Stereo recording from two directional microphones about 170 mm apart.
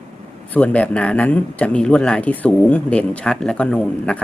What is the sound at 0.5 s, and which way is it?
Speech, 10° left (ahead or behind).